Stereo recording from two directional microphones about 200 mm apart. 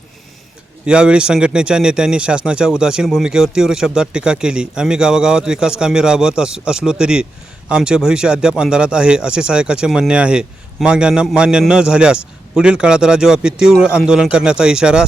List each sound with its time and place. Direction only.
0.9 s speech: 5° right (ahead or behind)